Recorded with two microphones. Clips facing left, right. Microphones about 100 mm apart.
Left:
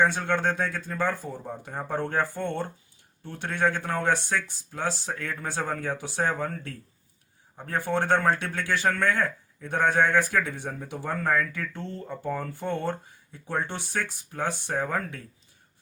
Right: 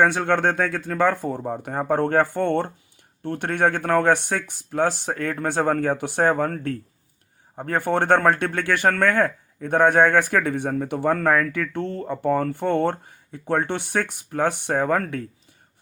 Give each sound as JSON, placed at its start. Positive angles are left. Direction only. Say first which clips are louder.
{"t": 0.0, "sound": "speech", "louder": "right 5 dB", "side_deg": -60}